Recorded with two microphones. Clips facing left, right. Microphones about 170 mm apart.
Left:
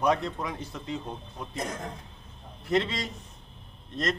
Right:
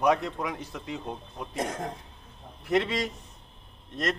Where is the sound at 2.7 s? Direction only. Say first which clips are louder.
Right 1 dB; 15° right (ahead or behind).